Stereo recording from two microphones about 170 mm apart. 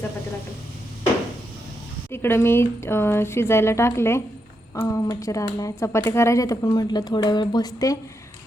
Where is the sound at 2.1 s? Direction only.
15° left (ahead or behind).